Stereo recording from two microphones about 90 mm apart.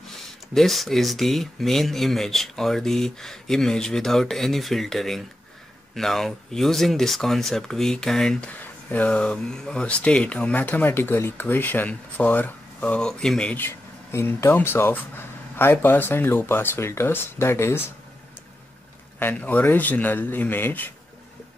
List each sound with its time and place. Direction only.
0.6 s speech: centre (ahead or behind)
8.5 s speech: 15° left (ahead or behind)
13.6 s speech: 25° left (ahead or behind)
19.3 s speech: 20° left (ahead or behind)